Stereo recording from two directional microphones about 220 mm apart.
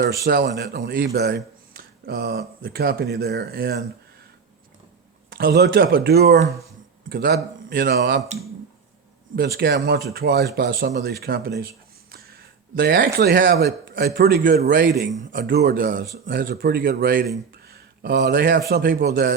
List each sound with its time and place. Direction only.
0.3 s speech: 50° right (ahead or behind)
5.3 s speech: 45° right (ahead or behind)
9.3 s speech: 45° right (ahead or behind)
12.7 s speech: 45° right (ahead or behind)
17.7 s a sound: 45° right (ahead or behind)
18.7 s speech: 45° right (ahead or behind)